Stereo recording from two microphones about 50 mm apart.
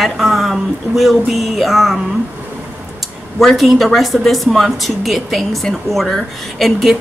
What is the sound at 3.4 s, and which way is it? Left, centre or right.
Speech, centre.